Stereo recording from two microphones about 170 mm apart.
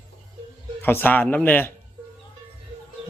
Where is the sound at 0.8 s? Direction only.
10° left (ahead or behind).